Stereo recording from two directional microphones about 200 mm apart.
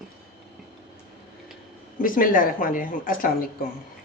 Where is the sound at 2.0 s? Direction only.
45° left (ahead or behind).